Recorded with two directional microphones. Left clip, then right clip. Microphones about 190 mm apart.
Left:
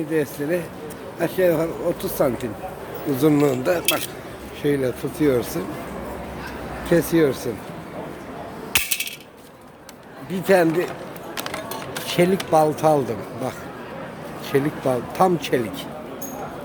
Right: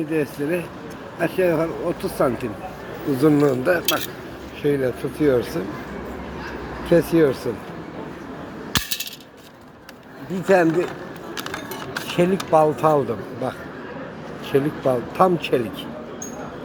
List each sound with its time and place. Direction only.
0.1 s speech: 10° left (ahead or behind)
6.8 s speech: 10° left (ahead or behind)
10.4 s speech: 15° left (ahead or behind)
12.1 s speech: 20° left (ahead or behind)
14.5 s speech: 15° left (ahead or behind)